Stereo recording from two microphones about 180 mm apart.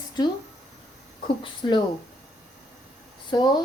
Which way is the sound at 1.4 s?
25° left (ahead or behind).